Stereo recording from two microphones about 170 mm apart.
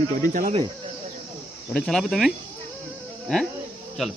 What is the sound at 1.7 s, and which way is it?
Speech, centre (ahead or behind).